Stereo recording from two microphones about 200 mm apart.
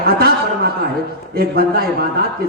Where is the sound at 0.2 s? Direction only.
50° right (ahead or behind).